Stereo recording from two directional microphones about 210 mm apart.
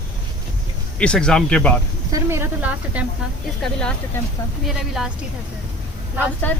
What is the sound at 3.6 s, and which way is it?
Speech, 5° left (ahead or behind).